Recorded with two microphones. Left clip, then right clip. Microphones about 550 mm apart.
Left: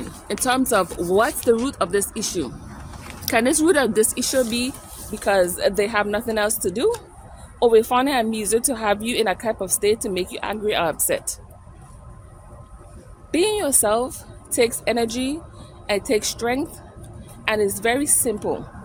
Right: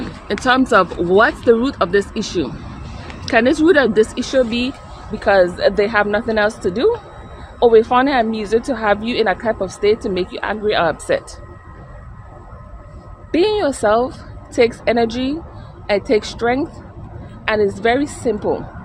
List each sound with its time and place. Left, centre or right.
0.3 s speech: left
13.3 s speech: left